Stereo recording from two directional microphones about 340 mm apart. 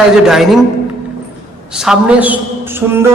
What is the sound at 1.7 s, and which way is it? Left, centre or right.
A man's voice, centre.